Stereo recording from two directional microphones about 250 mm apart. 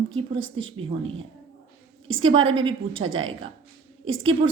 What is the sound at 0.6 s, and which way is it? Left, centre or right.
Speech, right.